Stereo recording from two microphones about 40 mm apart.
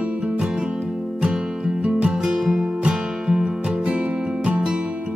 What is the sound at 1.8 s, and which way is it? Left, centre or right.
Music, right.